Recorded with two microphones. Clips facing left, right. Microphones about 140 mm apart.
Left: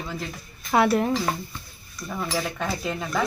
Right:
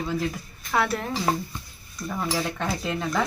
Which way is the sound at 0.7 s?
20° left (ahead or behind).